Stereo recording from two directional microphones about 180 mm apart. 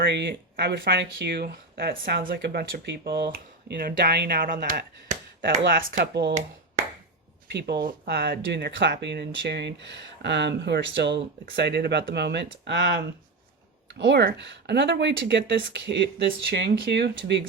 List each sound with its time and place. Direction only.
0.0 s speech: 75° right (ahead or behind)
3.3 s speech: 60° right (ahead or behind)
7.9 s speech: 60° right (ahead or behind)
14.0 s speech: 70° right (ahead or behind)